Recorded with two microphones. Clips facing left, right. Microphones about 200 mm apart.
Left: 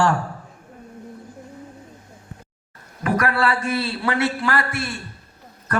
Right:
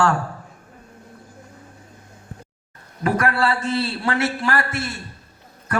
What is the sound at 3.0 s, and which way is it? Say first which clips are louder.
A man's voice: right 1 dB; 30° right (ahead or behind).